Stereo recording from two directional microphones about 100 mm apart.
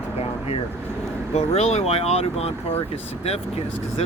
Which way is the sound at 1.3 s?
90° left.